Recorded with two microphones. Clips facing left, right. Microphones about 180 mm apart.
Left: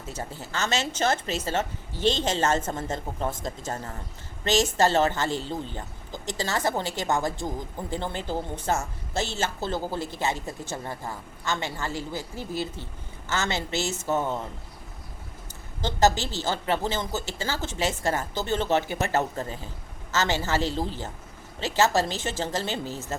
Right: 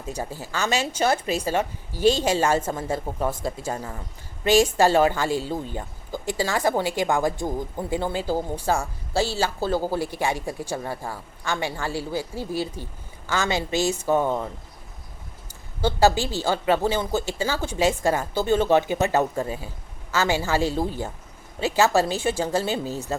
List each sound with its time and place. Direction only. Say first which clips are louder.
0.1 s a woman's voice: right 4 dB; 15° right (ahead or behind)
15.8 s a woman's voice: right 3 dB; 10° right (ahead or behind)